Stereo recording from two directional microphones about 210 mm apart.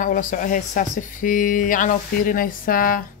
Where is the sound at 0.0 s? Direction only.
40° left (ahead or behind).